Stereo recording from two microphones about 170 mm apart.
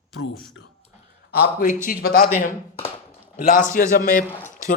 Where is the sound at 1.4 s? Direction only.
50° left (ahead or behind).